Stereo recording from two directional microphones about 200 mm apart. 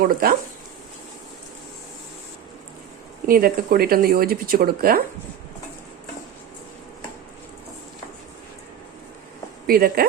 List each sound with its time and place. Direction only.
0.0 s speech: 45° right (ahead or behind)
3.2 s speech: 45° right (ahead or behind)
9.6 s speech: 50° right (ahead or behind)